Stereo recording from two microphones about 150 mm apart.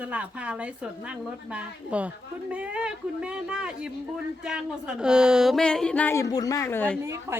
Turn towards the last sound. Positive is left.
turn(degrees=-20)  # may be behind; listen again after turning